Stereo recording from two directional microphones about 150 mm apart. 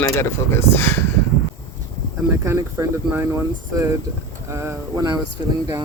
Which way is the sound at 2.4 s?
15° right (ahead or behind).